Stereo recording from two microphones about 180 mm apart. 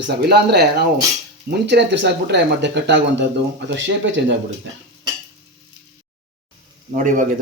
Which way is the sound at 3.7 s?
90° right.